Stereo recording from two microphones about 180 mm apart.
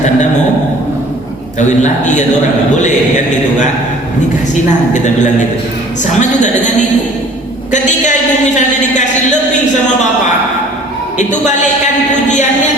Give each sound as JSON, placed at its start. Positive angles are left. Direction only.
{"t": 1.5, "sound": "a man's voice", "side_deg": 40}
{"t": 6.1, "sound": "speech", "side_deg": 40}
{"t": 11.2, "sound": "a man's voice", "side_deg": 40}